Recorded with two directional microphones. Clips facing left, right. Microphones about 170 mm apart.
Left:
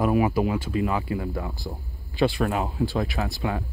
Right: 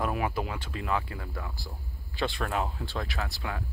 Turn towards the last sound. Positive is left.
turn(degrees=25)  # may be behind; listen again after turning